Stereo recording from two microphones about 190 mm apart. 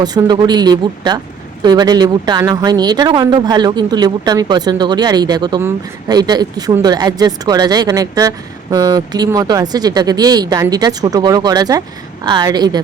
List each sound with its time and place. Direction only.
0.0 s speech: 20° right (ahead or behind)